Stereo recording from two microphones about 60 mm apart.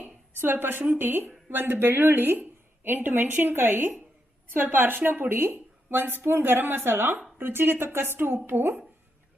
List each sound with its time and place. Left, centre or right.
0.3 s speech: right